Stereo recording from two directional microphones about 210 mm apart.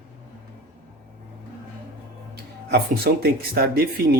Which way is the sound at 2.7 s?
50° right (ahead or behind).